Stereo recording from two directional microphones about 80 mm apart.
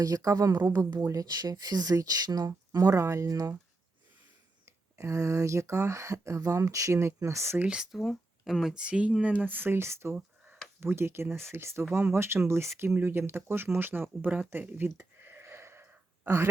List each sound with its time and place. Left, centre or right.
0.0 s speech: right
2.5 s speech: right
4.6 s speech: right
7.6 s speech: centre; by 10.2 s right
10.2 s a sound: right
10.8 s speech: right
14.8 s a sound: right